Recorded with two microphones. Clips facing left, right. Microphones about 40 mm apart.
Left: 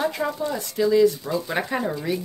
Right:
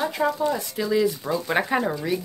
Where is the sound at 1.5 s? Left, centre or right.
Right.